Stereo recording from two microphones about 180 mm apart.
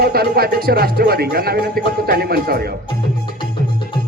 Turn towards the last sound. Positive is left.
turn(degrees=-60)  # may be behind; listen again after turning